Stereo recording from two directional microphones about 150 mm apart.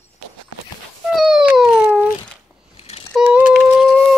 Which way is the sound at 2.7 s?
40° left (ahead or behind).